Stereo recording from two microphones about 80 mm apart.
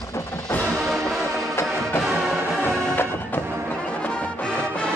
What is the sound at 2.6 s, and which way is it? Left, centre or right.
Music, left.